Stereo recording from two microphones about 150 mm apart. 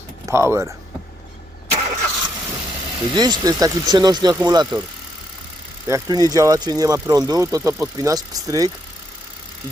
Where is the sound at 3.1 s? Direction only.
30° right (ahead or behind).